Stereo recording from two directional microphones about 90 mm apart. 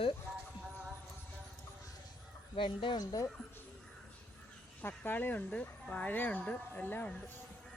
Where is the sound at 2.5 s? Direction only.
65° left (ahead or behind).